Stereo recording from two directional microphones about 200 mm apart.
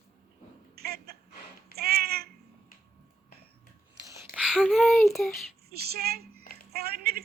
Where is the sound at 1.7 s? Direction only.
50° right (ahead or behind).